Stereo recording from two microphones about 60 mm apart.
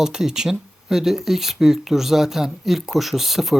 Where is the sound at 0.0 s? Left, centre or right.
Centre.